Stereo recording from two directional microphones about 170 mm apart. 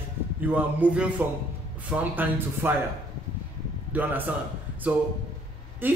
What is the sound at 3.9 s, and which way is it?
Speech, 10° right (ahead or behind).